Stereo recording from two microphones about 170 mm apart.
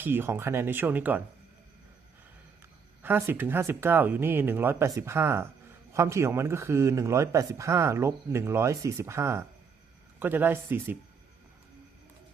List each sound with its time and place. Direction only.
0.0 s speech: 15° right (ahead or behind)
2.6 s speech: 15° right (ahead or behind)